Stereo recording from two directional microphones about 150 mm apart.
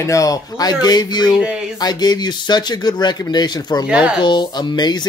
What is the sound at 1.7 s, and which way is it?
Speech, 25° left (ahead or behind).